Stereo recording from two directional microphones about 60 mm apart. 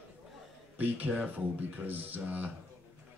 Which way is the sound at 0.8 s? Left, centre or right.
Right.